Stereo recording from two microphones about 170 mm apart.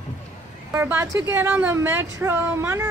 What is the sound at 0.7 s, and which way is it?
A woman's voice, 15° right (ahead or behind).